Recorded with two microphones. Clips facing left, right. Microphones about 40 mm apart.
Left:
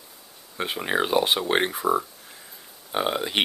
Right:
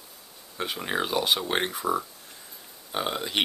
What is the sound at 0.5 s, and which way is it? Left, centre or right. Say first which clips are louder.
Speech: left 4 dB; centre.